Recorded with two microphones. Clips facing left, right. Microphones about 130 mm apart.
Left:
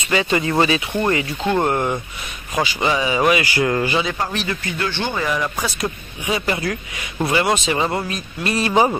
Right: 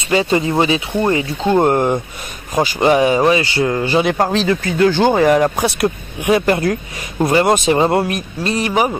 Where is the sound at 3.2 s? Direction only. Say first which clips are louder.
Right 3 dB; 30° right (ahead or behind).